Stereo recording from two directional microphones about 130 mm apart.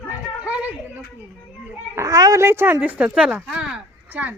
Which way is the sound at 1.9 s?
25° right (ahead or behind).